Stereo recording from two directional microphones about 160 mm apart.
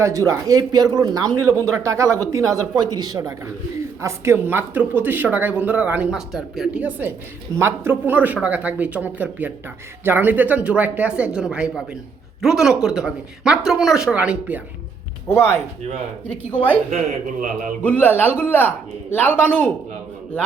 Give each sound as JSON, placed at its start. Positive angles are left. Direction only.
{"t": 0.0, "sound": "speech", "side_deg": -20}
{"t": 16.9, "sound": "a man's voice", "side_deg": -50}
{"t": 17.8, "sound": "a man's voice", "side_deg": 10}